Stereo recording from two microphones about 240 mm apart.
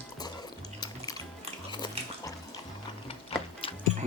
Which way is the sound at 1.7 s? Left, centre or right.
Centre.